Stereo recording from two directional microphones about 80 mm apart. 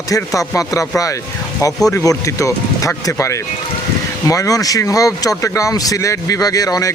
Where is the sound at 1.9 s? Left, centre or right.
Left.